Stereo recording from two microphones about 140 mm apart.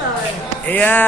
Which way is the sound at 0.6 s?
10° left (ahead or behind).